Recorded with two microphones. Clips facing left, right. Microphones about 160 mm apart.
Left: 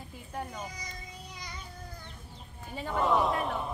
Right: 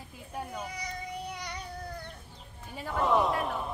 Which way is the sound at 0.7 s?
70° right (ahead or behind).